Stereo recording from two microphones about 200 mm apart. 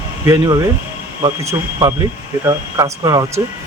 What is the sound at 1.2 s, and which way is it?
Speech, 20° right (ahead or behind).